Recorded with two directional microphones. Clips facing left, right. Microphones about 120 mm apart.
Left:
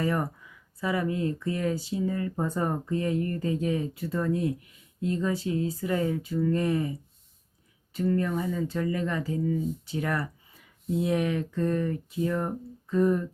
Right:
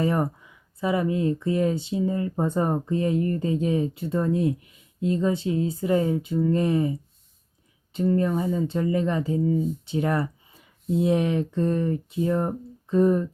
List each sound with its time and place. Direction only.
0.0 s speech: 25° right (ahead or behind)
7.9 s speech: 25° right (ahead or behind)